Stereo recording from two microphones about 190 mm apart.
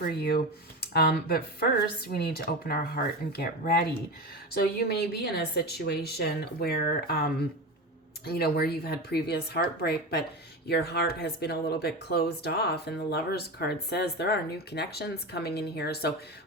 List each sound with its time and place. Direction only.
0.0 s speech: 55° left (ahead or behind)